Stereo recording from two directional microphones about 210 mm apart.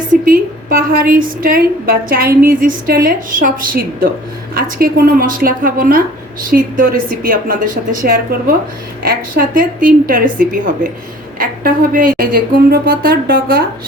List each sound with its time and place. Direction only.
0.1 s a woman's voice: 45° right (ahead or behind)